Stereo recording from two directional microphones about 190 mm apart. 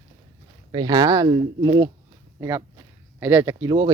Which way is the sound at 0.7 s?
20° right (ahead or behind).